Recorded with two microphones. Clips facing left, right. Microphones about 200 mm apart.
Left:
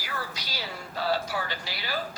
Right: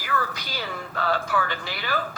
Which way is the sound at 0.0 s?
50° right (ahead or behind).